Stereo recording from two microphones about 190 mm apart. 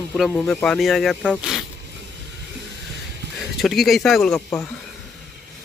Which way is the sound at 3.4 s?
Centre (ahead or behind).